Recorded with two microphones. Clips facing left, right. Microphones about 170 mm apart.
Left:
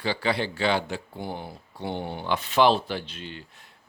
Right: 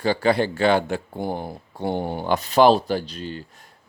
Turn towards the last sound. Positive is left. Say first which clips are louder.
# right 7 dB
turn(degrees=-40)  # may be behind; listen again after turning